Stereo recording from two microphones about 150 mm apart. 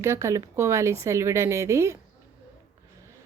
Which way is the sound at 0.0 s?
20° right (ahead or behind).